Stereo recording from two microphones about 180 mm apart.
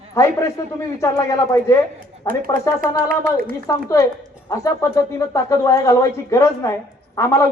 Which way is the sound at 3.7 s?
15° left (ahead or behind).